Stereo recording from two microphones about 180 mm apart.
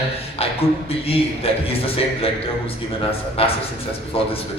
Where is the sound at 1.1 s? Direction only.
30° left (ahead or behind).